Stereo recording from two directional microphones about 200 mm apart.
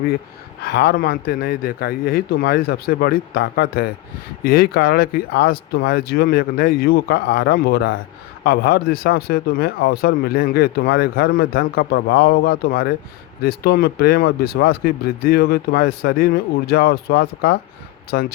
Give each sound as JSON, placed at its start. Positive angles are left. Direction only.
{"t": 0.6, "sound": "speech", "side_deg": 50}